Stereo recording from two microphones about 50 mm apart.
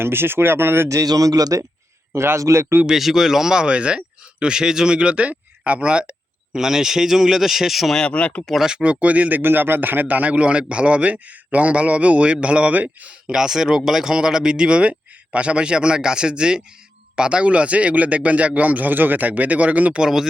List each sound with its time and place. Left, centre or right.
0.0 s speech: right
1.5 s speech: right
2.1 s a man's voice: right
2.8 s speech: centre; by 6.6 s right
6.6 s speech: centre
7.9 s speech: left
8.5 s speech: centre
8.8 s speech: right
9.4 s speech: right
13.3 s speech: centre; by 20.0 s right
20.0 s speech: centre